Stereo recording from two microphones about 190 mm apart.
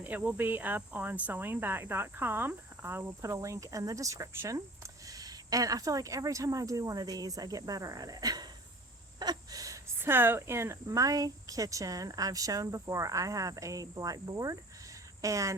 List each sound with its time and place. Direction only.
0.0 s speech: 10° right (ahead or behind)